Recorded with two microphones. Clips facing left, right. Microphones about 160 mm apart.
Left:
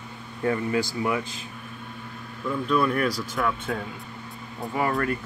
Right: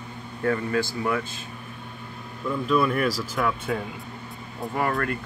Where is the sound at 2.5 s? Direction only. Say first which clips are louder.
Right 1 dB; centre (ahead or behind).